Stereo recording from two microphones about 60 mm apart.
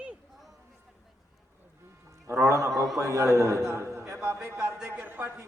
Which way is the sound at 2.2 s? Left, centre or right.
Right.